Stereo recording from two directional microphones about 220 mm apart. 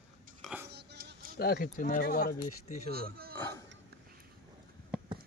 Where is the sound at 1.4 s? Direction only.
45° left (ahead or behind).